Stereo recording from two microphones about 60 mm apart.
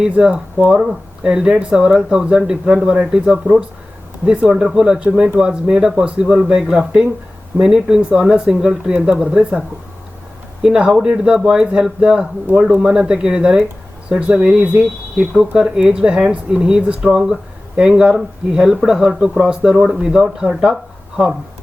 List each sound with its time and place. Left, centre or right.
0.2 s speech: centre
4.4 s speech: centre
15.4 s speech: centre